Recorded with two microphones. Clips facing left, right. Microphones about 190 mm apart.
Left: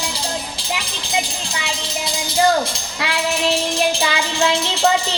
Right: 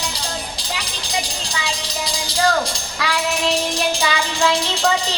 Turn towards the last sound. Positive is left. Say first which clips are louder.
# left 1 dB
turn(degrees=25)  # may be behind; listen again after turning